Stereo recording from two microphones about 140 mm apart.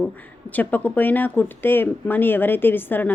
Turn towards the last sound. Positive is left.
turn(degrees=15)  # may be behind; listen again after turning